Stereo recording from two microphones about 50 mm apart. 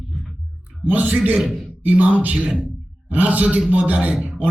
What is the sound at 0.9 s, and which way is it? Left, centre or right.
Speech, right.